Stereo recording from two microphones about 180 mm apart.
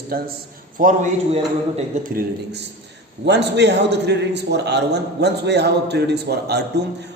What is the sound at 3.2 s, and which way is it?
A man's voice, 70° right (ahead or behind).